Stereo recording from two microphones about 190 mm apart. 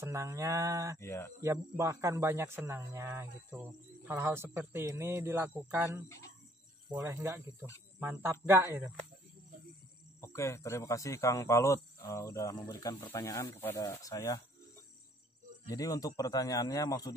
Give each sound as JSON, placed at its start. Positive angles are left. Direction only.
{"t": 0.0, "sound": "speech", "side_deg": -15}
{"t": 0.9, "sound": "speech", "side_deg": 15}
{"t": 1.4, "sound": "speech", "side_deg": -15}
{"t": 10.2, "sound": "speech", "side_deg": 15}
{"t": 15.7, "sound": "speech", "side_deg": 20}